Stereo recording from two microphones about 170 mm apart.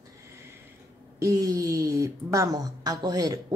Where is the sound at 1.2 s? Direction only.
20° right (ahead or behind).